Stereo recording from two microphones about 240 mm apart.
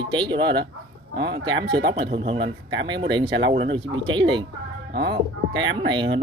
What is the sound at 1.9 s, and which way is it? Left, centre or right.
Speech, right.